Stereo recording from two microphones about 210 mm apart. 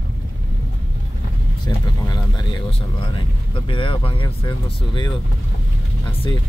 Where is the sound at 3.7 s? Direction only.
25° left (ahead or behind).